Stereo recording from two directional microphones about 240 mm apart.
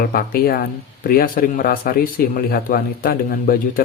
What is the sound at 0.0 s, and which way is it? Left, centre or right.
Speech, left.